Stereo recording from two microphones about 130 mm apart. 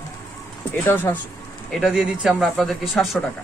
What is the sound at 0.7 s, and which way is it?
Speech, 15° left (ahead or behind).